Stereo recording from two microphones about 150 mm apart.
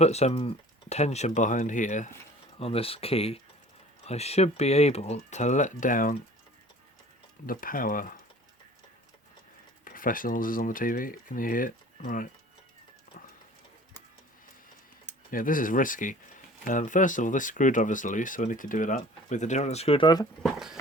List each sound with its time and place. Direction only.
0.0 s speech: 45° left (ahead or behind)
2.6 s speech: 40° left (ahead or behind); by 6.1 s 65° left (ahead or behind)
7.4 s speech: 70° left (ahead or behind)
9.8 s speech: 65° left (ahead or behind)
15.3 s speech: 65° left (ahead or behind); by 20.2 s 30° left (ahead or behind)
20.4 s a sound: centre (ahead or behind)